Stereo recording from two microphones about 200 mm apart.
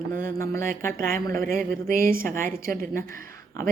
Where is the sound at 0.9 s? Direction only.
45° right (ahead or behind).